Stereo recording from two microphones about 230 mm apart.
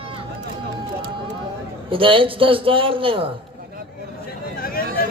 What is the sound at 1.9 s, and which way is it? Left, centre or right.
A man's voice, right.